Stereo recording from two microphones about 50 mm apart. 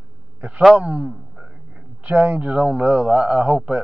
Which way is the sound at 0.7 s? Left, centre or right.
Right.